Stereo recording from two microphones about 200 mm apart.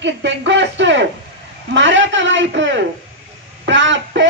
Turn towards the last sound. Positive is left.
turn(degrees=-65)  # may be behind; listen again after turning